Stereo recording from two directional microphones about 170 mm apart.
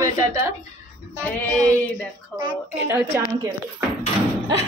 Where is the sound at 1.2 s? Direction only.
5° left (ahead or behind).